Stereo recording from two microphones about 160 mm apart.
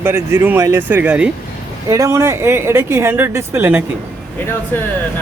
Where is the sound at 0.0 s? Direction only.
15° right (ahead or behind).